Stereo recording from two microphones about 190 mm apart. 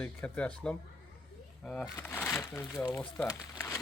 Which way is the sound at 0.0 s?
10° left (ahead or behind).